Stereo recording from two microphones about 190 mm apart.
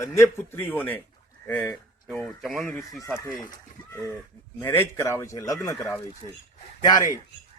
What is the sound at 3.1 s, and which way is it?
Speech, 20° left (ahead or behind).